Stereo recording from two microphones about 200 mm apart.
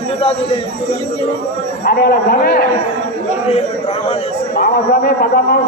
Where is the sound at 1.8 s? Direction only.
50° left (ahead or behind).